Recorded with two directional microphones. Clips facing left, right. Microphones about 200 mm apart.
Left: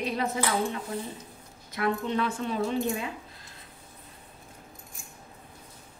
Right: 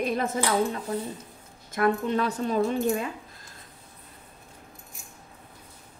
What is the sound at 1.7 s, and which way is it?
Speech, 50° right (ahead or behind).